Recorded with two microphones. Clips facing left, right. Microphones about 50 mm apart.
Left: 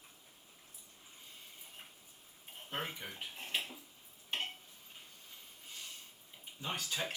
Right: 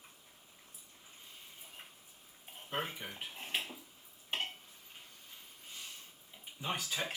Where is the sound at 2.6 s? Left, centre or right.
Centre.